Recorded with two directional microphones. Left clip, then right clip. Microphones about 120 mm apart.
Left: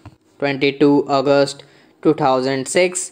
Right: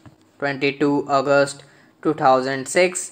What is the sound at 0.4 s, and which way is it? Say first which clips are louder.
A man's voice: left 5 dB; 25° left (ahead or behind).